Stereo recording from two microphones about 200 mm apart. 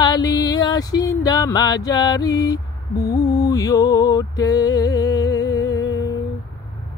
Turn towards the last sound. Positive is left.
turn(degrees=20)  # may be behind; listen again after turning